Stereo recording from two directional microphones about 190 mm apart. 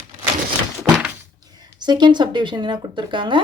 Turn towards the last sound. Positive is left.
turn(degrees=-25)  # may be behind; listen again after turning